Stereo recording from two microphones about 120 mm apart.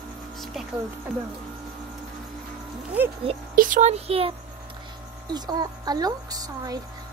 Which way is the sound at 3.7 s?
70° right (ahead or behind).